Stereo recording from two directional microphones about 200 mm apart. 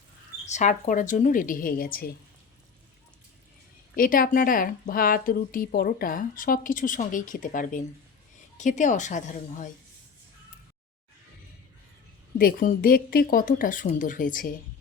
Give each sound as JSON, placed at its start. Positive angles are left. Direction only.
{"t": 0.4, "sound": "a woman's voice", "side_deg": 35}
{"t": 3.9, "sound": "a woman's voice", "side_deg": 45}
{"t": 12.4, "sound": "speech", "side_deg": 45}